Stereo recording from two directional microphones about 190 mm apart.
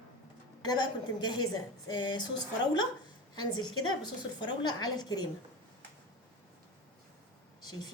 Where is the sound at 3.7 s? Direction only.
90° left.